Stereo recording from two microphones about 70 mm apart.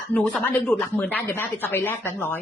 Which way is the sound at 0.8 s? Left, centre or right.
Centre.